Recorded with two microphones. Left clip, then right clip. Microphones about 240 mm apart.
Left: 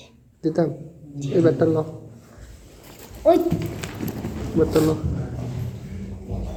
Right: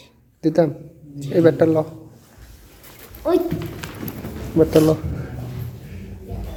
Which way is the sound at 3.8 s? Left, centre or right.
Centre.